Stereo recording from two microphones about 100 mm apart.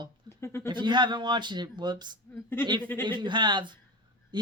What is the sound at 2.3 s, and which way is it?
Speech, 20° left (ahead or behind).